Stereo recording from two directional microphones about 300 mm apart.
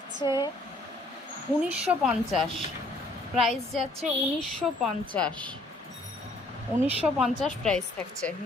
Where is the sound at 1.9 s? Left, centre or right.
Centre.